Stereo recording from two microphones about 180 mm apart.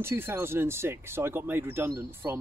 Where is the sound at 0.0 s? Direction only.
15° right (ahead or behind).